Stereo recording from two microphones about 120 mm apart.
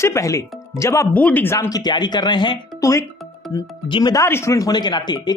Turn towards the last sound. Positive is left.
turn(degrees=35)  # may be behind; listen again after turning